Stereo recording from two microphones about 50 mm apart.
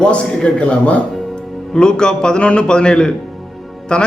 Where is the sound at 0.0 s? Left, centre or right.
Left.